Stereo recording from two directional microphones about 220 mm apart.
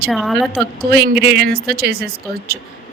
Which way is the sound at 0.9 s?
45° right (ahead or behind).